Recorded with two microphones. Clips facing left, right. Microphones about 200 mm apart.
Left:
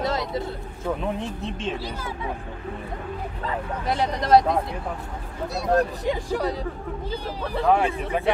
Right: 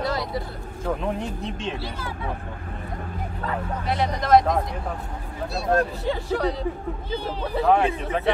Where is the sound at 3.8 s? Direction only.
30° left (ahead or behind).